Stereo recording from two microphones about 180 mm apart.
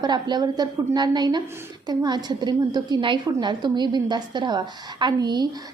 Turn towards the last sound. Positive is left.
turn(degrees=-25)  # may be behind; listen again after turning